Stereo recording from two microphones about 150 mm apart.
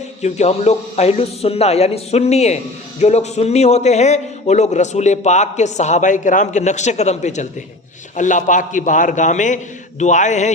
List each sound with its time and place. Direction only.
0.2 s a man's voice: 50° left (ahead or behind)